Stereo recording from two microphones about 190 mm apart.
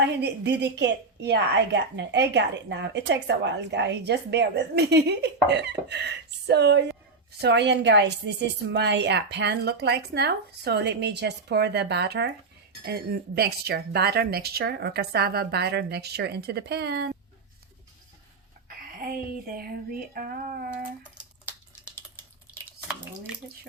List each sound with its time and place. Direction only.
0.2 s a woman's voice: 65° right (ahead or behind)
18.8 s speech: 50° right (ahead or behind)
21.2 s a sound: 5° right (ahead or behind)